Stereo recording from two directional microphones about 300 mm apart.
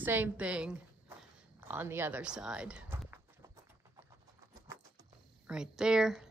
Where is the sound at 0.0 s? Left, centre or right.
Centre.